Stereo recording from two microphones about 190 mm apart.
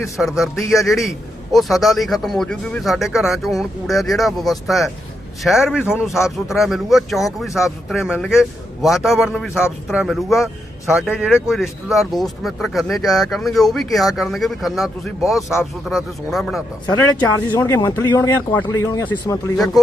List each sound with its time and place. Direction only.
0.2 s speech: centre (ahead or behind)
17.0 s speech: 10° left (ahead or behind)
19.5 s speech: centre (ahead or behind)